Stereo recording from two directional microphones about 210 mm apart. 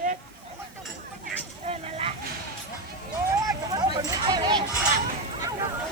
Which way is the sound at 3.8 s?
20° right (ahead or behind).